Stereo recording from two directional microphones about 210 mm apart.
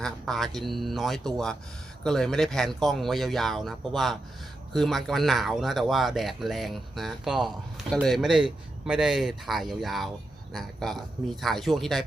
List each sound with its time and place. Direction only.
0.0 s speech: centre (ahead or behind)